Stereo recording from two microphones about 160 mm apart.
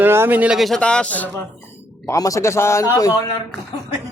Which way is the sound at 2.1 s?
20° left (ahead or behind).